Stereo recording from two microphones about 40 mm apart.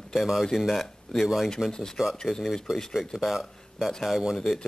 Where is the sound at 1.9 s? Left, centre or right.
Centre.